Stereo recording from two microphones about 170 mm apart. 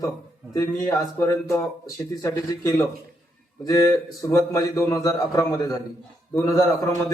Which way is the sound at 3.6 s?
20° left (ahead or behind).